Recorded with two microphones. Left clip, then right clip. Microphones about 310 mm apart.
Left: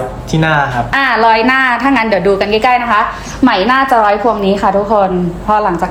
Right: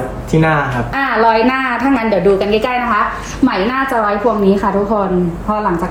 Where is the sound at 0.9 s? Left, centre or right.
Centre.